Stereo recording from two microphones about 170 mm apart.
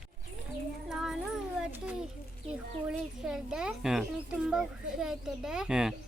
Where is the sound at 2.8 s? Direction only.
5° right (ahead or behind).